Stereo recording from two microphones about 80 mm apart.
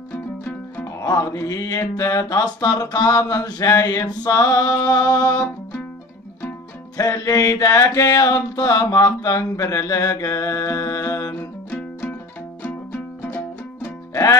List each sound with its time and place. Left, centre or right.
0.1 s music: left
1.0 s mantra: left
7.0 s mantra: left
11.3 s music: left
13.8 s music: left